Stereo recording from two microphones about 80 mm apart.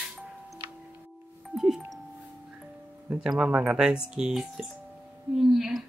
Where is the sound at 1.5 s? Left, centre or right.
Centre.